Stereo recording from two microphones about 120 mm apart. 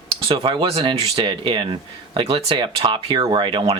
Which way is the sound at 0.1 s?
50° right (ahead or behind).